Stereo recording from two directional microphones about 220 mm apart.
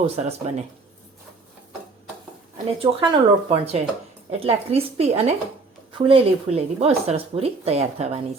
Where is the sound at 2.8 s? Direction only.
25° right (ahead or behind).